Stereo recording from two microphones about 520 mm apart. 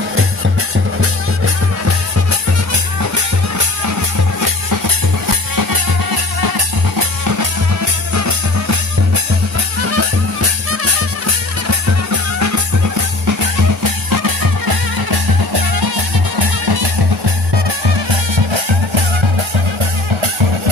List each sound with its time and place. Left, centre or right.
3.0 s music: right
17.8 s music: right